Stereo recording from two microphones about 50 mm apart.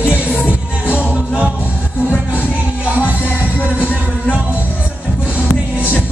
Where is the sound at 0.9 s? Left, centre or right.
Right.